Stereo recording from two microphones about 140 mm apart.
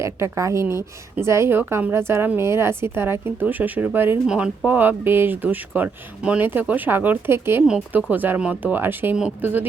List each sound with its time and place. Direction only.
0.0 s a woman's voice: 20° right (ahead or behind)